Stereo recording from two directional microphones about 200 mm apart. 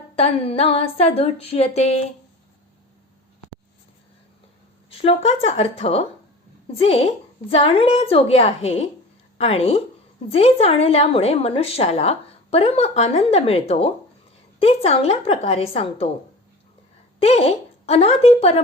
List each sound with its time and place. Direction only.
0.2 s a woman's voice: 30° left (ahead or behind)
4.9 s a woman's voice: 30° left (ahead or behind)
17.2 s a woman's voice: 30° left (ahead or behind)